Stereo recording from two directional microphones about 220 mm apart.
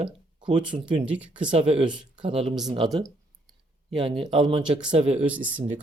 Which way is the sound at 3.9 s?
25° right (ahead or behind).